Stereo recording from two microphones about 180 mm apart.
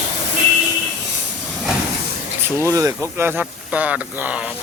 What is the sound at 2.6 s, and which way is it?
Speech, 15° right (ahead or behind).